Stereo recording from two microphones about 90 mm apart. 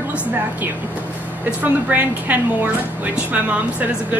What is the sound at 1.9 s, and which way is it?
A woman's voice, 20° right (ahead or behind).